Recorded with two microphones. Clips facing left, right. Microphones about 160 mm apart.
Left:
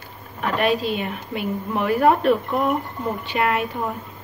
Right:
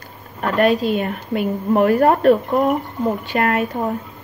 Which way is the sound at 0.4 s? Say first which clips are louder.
Right 5 dB; 45° right (ahead or behind).